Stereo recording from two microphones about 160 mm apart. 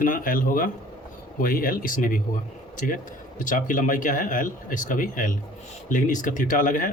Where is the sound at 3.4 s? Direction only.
55° left (ahead or behind).